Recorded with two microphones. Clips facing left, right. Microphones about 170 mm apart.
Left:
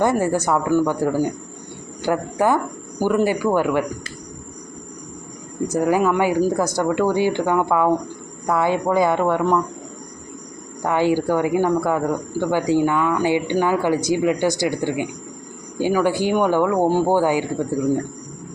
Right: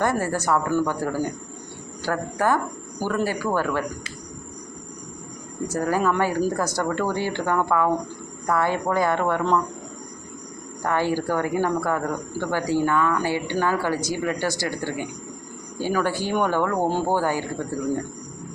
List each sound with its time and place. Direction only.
0.0 s speech: 15° left (ahead or behind)
5.6 s speech: 15° left (ahead or behind)
10.8 s speech: 15° left (ahead or behind)